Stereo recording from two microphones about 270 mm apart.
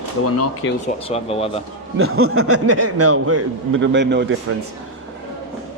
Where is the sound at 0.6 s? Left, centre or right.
Left.